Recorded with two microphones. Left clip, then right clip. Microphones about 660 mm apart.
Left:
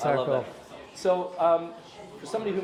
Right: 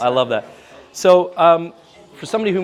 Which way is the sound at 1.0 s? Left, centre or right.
Right.